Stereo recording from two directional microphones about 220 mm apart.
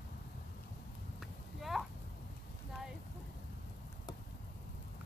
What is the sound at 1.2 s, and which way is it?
Clip-clop, centre (ahead or behind).